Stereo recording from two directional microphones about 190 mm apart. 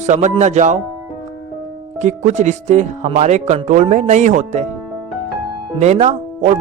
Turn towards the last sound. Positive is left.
turn(degrees=-35)  # may be behind; listen again after turning